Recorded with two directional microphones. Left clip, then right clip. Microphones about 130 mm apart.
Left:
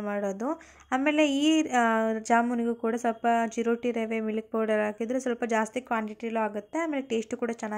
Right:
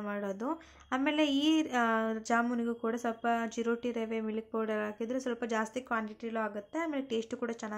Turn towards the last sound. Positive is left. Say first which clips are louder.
# left 5 dB
turn(degrees=35)  # may be behind; listen again after turning